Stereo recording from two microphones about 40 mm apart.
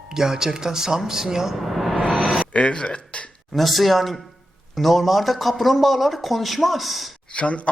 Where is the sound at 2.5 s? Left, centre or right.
Left.